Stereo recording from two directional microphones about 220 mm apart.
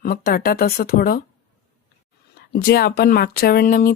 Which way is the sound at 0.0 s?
45° left (ahead or behind).